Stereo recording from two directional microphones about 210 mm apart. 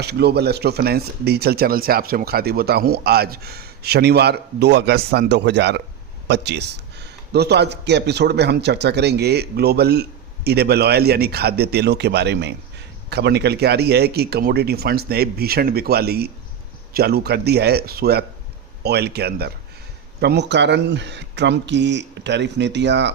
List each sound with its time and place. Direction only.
0.0 s speech: 50° right (ahead or behind)